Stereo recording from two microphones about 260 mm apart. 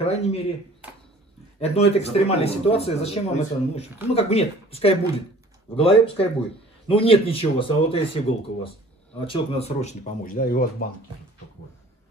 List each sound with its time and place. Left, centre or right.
0.0 s speech: left
1.6 s speech: left
9.2 s speech: left